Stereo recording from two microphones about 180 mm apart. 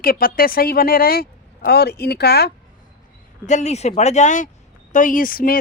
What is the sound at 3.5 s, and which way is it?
Speech, 40° left (ahead or behind).